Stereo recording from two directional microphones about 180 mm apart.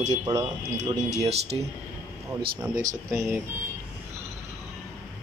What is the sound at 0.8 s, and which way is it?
Speech, 40° right (ahead or behind).